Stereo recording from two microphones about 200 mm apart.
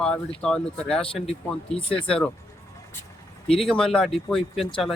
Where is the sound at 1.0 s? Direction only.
30° left (ahead or behind).